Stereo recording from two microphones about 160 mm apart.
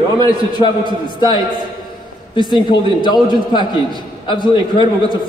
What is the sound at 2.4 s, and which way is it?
A man's voice, 30° left (ahead or behind).